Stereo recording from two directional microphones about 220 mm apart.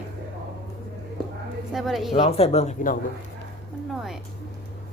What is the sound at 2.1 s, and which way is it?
Speech, 25° left (ahead or behind).